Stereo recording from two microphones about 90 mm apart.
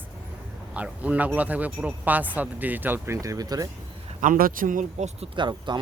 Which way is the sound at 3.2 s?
40° right (ahead or behind).